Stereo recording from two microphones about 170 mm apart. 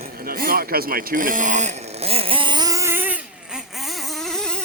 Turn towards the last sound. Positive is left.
turn(degrees=5)  # may be behind; listen again after turning